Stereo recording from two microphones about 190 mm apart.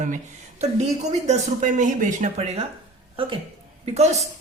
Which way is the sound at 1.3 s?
40° right (ahead or behind).